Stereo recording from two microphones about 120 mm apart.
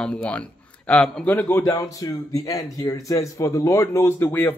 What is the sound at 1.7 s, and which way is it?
Speech, 30° left (ahead or behind).